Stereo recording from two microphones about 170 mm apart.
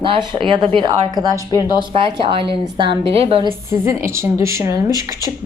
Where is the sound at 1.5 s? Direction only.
20° left (ahead or behind).